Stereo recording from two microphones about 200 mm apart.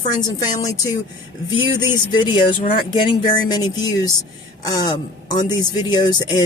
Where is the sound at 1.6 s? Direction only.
20° left (ahead or behind).